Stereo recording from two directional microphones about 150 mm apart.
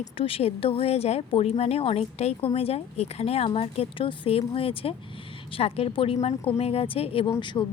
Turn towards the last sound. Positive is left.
turn(degrees=30)  # may be behind; listen again after turning